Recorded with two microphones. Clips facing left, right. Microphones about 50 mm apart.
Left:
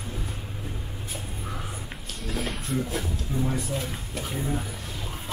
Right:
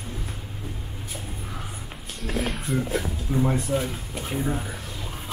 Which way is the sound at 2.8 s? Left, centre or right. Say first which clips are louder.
Right 3 dB; right.